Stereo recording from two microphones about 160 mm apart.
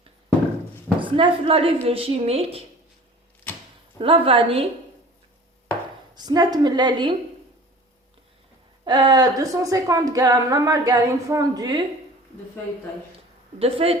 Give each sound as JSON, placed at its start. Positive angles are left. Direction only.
{"t": 0.9, "sound": "a woman's voice", "side_deg": -30}
{"t": 3.9, "sound": "a woman's voice", "side_deg": -35}
{"t": 6.1, "sound": "speech", "side_deg": -25}
{"t": 8.8, "sound": "speech", "side_deg": -25}
{"t": 13.6, "sound": "a woman's voice", "side_deg": -35}